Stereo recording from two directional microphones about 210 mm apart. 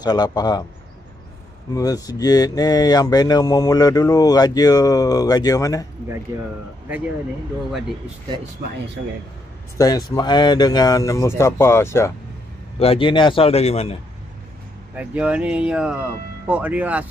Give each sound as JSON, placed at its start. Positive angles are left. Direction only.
{"t": 0.0, "sound": "a man's voice", "side_deg": 20}
{"t": 1.7, "sound": "speech", "side_deg": 15}
{"t": 6.3, "sound": "speech", "side_deg": -15}
{"t": 9.8, "sound": "speech", "side_deg": 20}
{"t": 12.7, "sound": "a man's voice", "side_deg": 30}
{"t": 15.0, "sound": "speech", "side_deg": -5}